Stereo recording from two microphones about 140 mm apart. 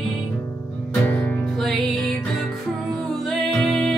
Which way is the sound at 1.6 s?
5° left (ahead or behind).